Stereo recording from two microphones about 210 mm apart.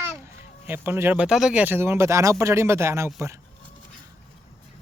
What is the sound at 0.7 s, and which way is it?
Speech, 10° right (ahead or behind).